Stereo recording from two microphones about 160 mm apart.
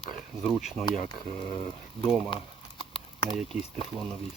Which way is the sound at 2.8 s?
30° left (ahead or behind).